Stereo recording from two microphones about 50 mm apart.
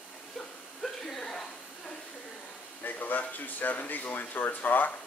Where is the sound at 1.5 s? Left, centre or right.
Left.